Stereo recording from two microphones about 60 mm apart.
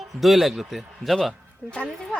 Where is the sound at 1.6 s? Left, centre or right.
Centre.